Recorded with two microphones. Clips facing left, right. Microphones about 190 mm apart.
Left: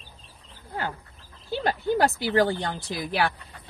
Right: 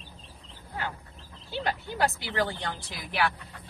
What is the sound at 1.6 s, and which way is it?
Speech, 40° left (ahead or behind).